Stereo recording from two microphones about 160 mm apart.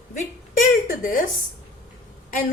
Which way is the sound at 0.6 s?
55° left (ahead or behind).